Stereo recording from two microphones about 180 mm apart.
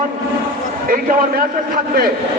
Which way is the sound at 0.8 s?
50° right (ahead or behind).